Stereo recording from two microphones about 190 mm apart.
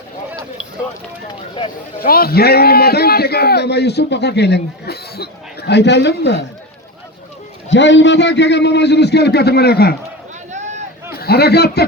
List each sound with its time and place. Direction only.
2.0 s a man's voice: 50° left (ahead or behind)
7.7 s a man's voice: 70° left (ahead or behind)
10.5 s vehicle: 40° right (ahead or behind)
11.1 s a man's voice: 55° left (ahead or behind)